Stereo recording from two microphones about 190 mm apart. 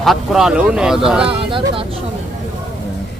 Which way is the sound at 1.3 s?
30° right (ahead or behind).